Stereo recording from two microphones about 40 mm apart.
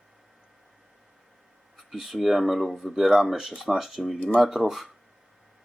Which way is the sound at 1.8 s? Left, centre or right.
Centre.